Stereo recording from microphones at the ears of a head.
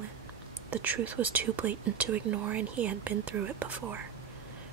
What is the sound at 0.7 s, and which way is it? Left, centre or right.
Speech, right.